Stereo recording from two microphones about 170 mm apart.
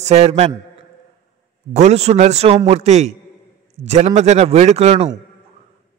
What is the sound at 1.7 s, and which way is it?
A man's voice, 40° right (ahead or behind).